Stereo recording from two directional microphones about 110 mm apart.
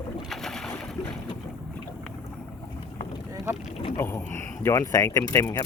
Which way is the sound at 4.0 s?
25° left (ahead or behind).